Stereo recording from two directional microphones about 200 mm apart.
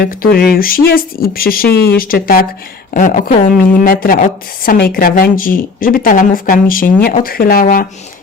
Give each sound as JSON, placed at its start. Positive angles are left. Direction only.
{"t": 0.0, "sound": "a woman's voice", "side_deg": 45}